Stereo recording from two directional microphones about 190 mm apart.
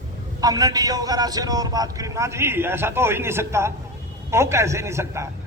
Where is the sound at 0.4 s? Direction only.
20° right (ahead or behind).